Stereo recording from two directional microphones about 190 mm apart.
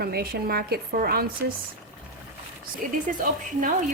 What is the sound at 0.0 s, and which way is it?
A woman's voice, 55° right (ahead or behind).